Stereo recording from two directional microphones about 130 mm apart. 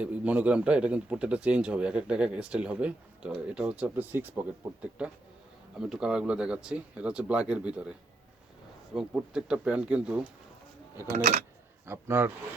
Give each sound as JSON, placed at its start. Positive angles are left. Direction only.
{"t": 0.0, "sound": "speech", "side_deg": -10}
{"t": 9.0, "sound": "speech", "side_deg": -5}
{"t": 11.1, "sound": "speech", "side_deg": -90}
{"t": 11.9, "sound": "speech", "side_deg": -15}